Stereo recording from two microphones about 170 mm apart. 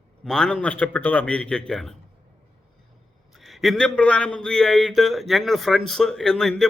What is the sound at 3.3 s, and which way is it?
A man's voice, centre (ahead or behind).